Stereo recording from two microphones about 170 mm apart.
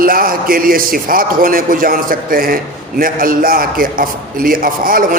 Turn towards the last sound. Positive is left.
turn(degrees=-55)  # may be behind; listen again after turning